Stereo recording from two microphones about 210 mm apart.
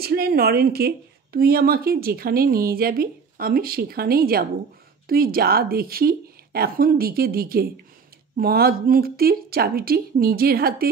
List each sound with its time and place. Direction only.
0.0 s speech: 45° right (ahead or behind)